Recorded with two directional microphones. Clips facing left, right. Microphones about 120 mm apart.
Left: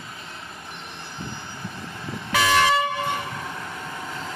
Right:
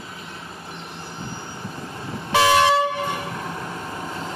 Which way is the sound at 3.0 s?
30° right (ahead or behind).